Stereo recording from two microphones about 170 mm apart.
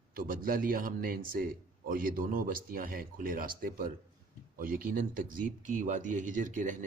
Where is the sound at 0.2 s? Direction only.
55° right (ahead or behind).